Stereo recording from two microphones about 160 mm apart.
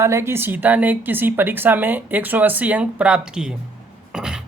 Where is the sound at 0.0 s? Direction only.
15° right (ahead or behind).